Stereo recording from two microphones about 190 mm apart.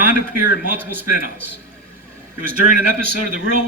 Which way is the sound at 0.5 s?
45° right (ahead or behind).